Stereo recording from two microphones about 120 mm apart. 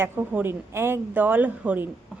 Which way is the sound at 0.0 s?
20° right (ahead or behind).